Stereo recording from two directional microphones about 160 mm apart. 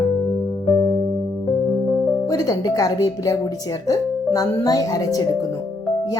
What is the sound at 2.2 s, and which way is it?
Speech, 20° left (ahead or behind).